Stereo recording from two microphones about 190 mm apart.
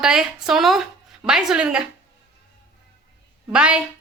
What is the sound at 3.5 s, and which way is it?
Speech, 5° right (ahead or behind).